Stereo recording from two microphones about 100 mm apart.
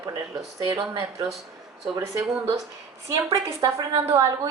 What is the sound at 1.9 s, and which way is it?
A woman's voice, 30° right (ahead or behind).